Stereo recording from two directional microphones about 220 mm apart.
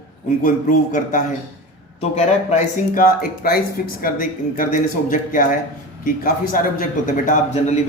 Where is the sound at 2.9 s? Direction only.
40° left (ahead or behind).